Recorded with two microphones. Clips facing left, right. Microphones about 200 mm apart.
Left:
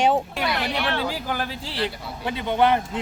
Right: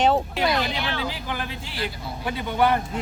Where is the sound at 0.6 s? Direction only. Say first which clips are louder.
Left 2 dB; 65° left (ahead or behind).